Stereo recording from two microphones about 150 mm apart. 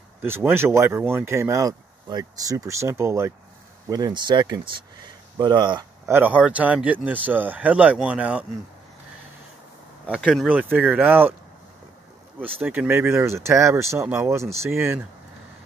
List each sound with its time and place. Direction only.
0.2 s speech: 15° right (ahead or behind)
3.9 s speech: 30° right (ahead or behind)
6.1 s speech: 10° right (ahead or behind)
10.2 s speech: centre (ahead or behind)
12.6 s speech: 10° right (ahead or behind)